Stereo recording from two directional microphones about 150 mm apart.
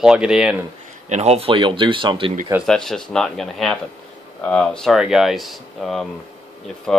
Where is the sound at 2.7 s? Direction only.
5° left (ahead or behind).